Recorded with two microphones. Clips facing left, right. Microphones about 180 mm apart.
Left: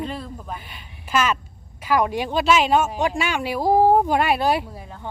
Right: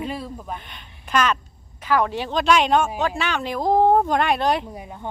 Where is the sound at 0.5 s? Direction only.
5° left (ahead or behind).